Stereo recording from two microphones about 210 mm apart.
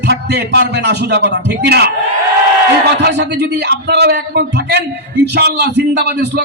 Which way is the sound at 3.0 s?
55° right (ahead or behind).